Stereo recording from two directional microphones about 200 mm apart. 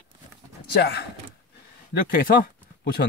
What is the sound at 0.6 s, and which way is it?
Speech, 55° left (ahead or behind).